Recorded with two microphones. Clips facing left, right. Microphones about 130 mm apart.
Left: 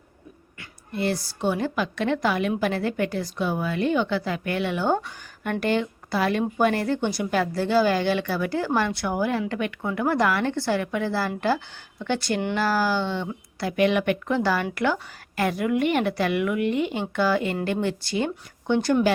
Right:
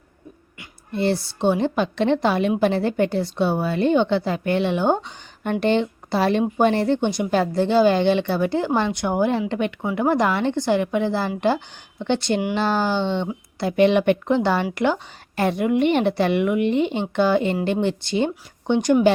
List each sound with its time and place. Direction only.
0.9 s speech: 25° right (ahead or behind)